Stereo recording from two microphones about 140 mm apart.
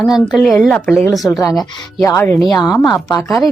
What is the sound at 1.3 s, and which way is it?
Speech, 25° left (ahead or behind).